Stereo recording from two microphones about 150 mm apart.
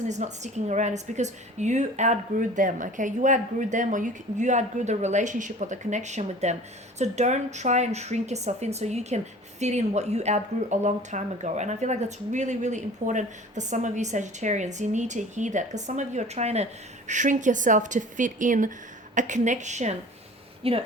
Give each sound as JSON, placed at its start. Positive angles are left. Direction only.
{"t": 0.1, "sound": "speech", "side_deg": -50}
{"t": 20.6, "sound": "speech", "side_deg": -40}